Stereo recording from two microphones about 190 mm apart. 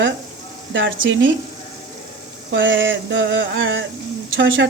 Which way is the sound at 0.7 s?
80° right.